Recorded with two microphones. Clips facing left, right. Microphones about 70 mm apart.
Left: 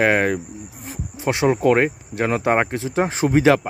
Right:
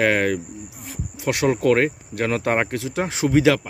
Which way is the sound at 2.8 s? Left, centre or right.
Left.